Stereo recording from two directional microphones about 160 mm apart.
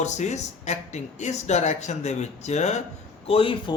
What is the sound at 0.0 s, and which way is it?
Speech, 45° left (ahead or behind).